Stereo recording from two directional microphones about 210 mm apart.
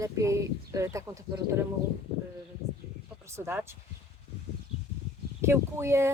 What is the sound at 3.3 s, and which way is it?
Speech, 10° right (ahead or behind).